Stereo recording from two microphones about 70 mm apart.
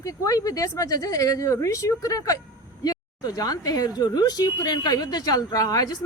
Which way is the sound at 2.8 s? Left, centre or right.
Left.